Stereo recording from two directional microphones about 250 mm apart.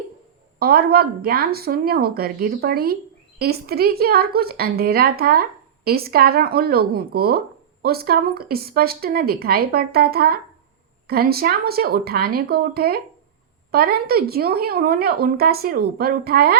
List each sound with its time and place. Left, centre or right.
0.6 s speech: right